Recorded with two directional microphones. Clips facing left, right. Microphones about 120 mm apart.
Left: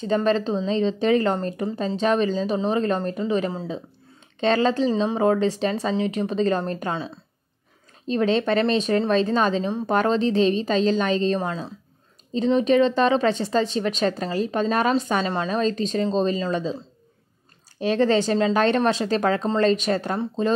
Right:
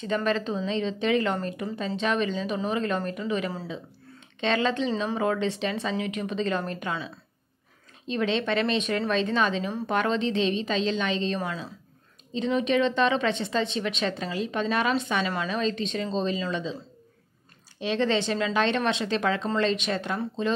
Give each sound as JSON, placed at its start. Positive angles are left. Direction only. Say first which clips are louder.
{"t": 0.0, "sound": "a woman's voice", "louder": "left 5 dB", "side_deg": 30}
{"t": 8.1, "sound": "a woman's voice", "louder": "left 5 dB", "side_deg": 40}
{"t": 17.7, "sound": "a woman's voice", "louder": "left 5 dB", "side_deg": 45}